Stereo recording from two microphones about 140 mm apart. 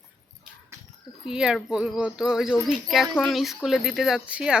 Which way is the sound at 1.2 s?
5° right (ahead or behind).